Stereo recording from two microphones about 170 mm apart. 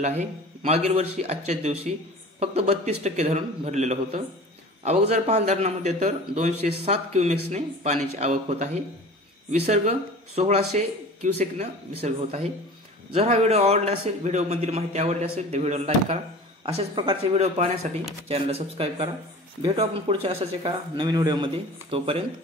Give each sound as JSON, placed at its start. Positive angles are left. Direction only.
{"t": 0.0, "sound": "a man's voice", "side_deg": -40}
{"t": 21.9, "sound": "a man's voice", "side_deg": -35}